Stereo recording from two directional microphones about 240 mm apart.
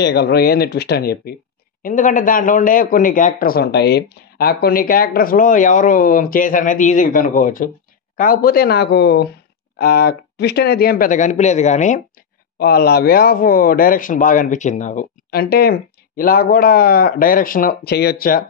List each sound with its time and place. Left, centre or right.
0.0 s a man's voice: left
12.5 s a man's voice: left